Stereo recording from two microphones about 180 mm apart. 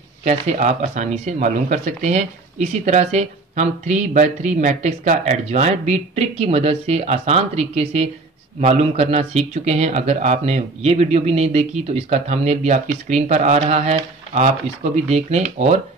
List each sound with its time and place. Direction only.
0.2 s speech: 40° right (ahead or behind)